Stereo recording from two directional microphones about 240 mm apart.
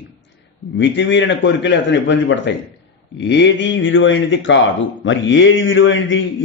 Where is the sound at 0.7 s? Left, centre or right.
Left.